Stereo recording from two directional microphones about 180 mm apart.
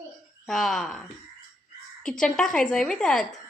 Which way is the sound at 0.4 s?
5° left (ahead or behind).